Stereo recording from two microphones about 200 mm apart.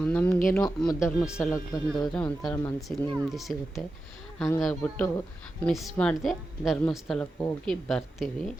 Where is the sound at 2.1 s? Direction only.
5° left (ahead or behind).